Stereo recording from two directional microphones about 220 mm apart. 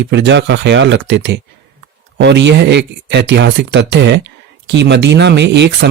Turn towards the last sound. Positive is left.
turn(degrees=-50)  # may be behind; listen again after turning